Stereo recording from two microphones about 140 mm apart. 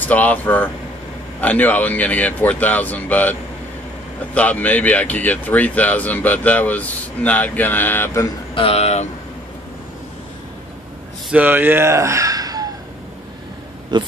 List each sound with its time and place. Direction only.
0.0 s speech: 10° left (ahead or behind)
8.5 s speech: 45° left (ahead or behind)
11.2 s speech: 10° right (ahead or behind)
13.9 s speech: 30° right (ahead or behind)